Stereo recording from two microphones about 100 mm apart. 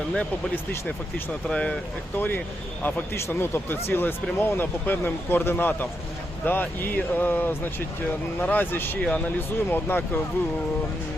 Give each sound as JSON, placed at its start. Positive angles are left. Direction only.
{"t": 0.1, "sound": "speech", "side_deg": 10}